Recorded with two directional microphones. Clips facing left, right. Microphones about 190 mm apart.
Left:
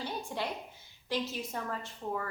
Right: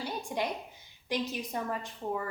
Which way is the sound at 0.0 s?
15° right (ahead or behind).